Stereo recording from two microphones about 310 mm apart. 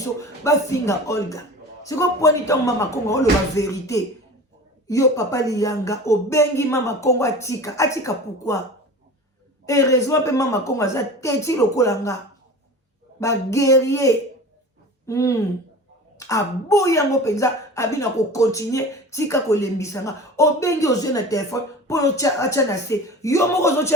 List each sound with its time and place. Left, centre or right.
0.0 s a woman's voice: centre
9.6 s a woman's voice: centre
13.1 s a woman's voice: centre